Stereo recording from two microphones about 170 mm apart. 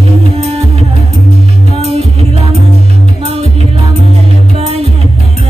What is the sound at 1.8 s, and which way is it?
Music, 35° right (ahead or behind).